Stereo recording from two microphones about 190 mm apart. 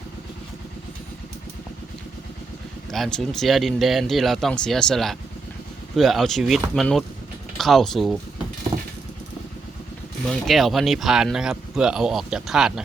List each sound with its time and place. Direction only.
2.9 s speech: centre (ahead or behind)
8.7 s vehicle: 25° right (ahead or behind)
10.4 s speech: centre (ahead or behind)